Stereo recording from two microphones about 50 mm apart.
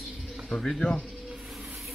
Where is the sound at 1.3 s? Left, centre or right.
Centre.